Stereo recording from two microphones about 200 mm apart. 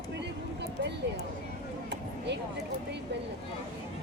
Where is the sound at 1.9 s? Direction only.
55° right (ahead or behind).